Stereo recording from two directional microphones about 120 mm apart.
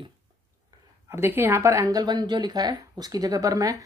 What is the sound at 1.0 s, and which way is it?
Speech, 20° right (ahead or behind).